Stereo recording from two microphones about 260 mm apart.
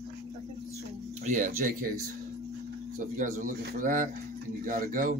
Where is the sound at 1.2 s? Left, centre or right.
Right.